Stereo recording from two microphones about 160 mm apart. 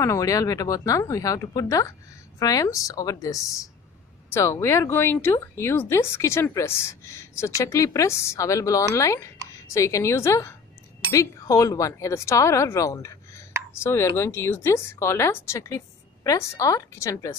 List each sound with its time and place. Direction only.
0.0 s speech: 20° left (ahead or behind)